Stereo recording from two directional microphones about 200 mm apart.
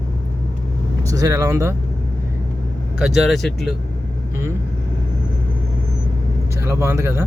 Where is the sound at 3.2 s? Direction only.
Centre (ahead or behind).